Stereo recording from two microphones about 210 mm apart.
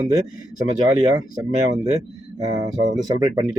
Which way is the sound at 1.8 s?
30° right (ahead or behind).